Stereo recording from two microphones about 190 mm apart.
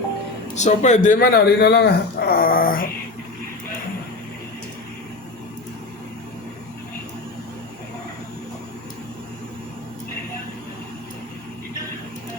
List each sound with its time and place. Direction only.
0.5 s speech: 40° left (ahead or behind)